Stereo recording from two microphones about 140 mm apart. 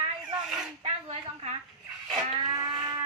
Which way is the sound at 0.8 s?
50° right (ahead or behind).